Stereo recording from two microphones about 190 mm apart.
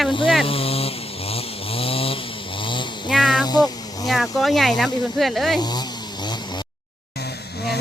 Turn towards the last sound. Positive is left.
turn(degrees=60)  # may be behind; listen again after turning